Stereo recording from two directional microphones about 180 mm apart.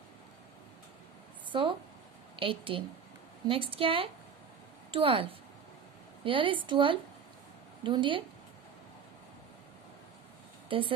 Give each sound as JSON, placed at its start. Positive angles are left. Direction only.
{"t": 1.5, "sound": "a woman's voice", "side_deg": -30}
{"t": 10.7, "sound": "speech", "side_deg": -30}